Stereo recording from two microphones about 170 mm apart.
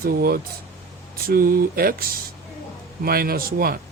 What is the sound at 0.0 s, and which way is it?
Speech, 60° right (ahead or behind).